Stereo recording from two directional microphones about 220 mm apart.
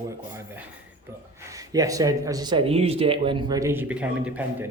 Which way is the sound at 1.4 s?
15° right (ahead or behind).